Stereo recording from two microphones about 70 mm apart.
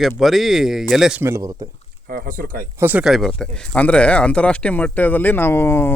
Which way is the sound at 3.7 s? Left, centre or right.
Centre.